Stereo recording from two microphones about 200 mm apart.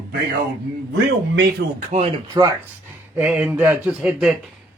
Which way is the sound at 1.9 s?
35° right (ahead or behind).